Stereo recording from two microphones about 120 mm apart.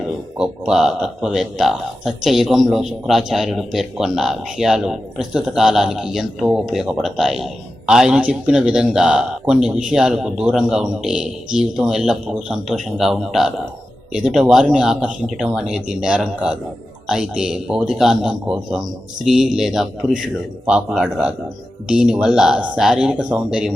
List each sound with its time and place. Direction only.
0.3 s a man's voice: 5° right (ahead or behind)